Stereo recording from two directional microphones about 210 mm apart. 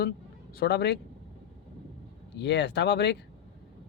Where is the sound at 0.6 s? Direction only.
50° left (ahead or behind).